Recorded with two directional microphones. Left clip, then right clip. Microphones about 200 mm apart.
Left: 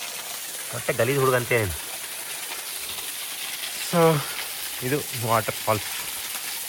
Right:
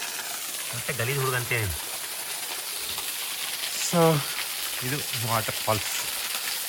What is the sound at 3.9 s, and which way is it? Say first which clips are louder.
Speech: left 2 dB; 5° right (ahead or behind).